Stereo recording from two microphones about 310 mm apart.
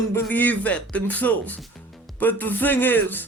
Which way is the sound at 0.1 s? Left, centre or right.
Centre.